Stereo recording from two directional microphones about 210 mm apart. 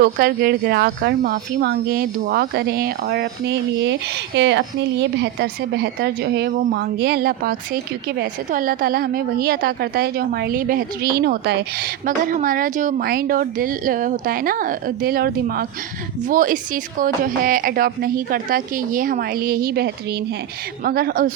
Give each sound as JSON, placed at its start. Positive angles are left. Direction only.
{"t": 0.0, "sound": "speech", "side_deg": -45}
{"t": 12.0, "sound": "a woman's voice", "side_deg": -40}